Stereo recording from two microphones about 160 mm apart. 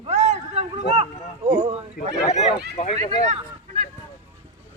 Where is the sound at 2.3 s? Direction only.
45° left (ahead or behind).